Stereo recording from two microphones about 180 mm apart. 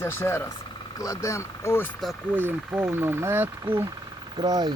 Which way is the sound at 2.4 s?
10° right (ahead or behind).